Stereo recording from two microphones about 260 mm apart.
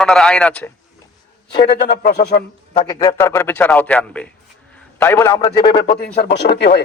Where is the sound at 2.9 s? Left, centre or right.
Centre.